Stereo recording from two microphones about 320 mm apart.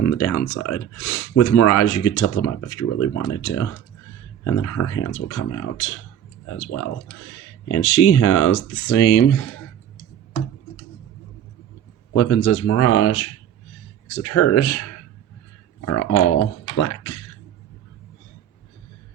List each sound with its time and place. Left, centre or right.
0.0 s speech: left
12.1 s speech: left